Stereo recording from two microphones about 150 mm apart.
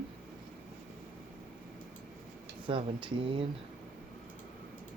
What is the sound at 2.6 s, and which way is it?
Speech, 35° right (ahead or behind).